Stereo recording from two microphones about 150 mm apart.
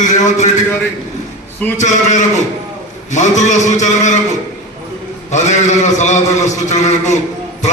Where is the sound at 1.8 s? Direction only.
55° left (ahead or behind).